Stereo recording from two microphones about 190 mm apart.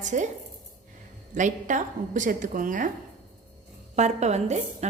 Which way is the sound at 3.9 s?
35° right (ahead or behind).